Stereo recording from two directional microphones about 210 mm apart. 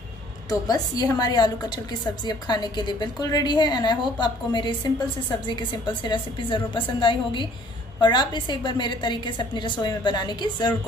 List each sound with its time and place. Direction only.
0.5 s a woman's voice: 15° left (ahead or behind)